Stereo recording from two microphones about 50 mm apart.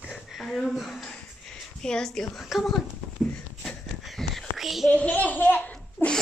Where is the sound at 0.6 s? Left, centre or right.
Centre.